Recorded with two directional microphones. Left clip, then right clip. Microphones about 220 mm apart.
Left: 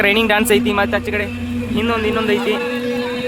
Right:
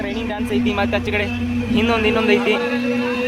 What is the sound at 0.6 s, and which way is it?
Speech, 15° left (ahead or behind).